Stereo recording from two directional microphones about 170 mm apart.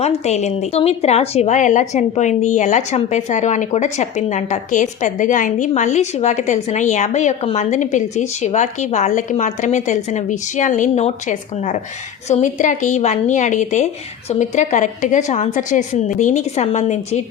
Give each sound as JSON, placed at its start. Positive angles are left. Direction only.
{"t": 0.0, "sound": "a woman's voice", "side_deg": 40}